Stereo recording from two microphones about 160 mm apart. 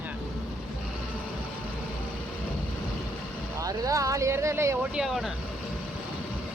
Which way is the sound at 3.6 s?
20° right (ahead or behind).